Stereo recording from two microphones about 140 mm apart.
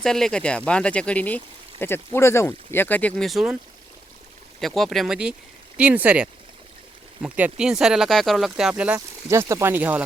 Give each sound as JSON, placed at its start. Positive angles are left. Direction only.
{"t": 0.0, "sound": "speech", "side_deg": 5}
{"t": 4.6, "sound": "speech", "side_deg": 0}
{"t": 9.3, "sound": "speech", "side_deg": -20}